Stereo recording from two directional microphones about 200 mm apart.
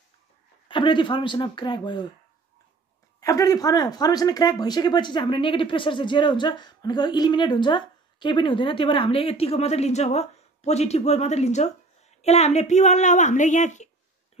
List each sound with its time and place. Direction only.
0.7 s speech: 25° left (ahead or behind)
3.2 s speech: 15° left (ahead or behind); by 13.8 s 35° left (ahead or behind)